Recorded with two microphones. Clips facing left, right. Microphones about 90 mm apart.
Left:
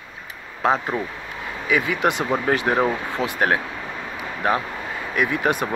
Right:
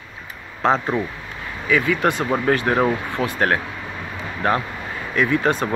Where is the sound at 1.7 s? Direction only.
15° left (ahead or behind).